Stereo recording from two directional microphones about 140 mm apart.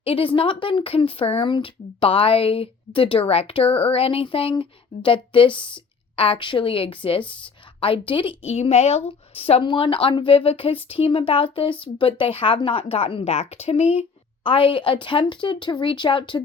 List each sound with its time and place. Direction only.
0.0 s a woman's voice: 40° left (ahead or behind)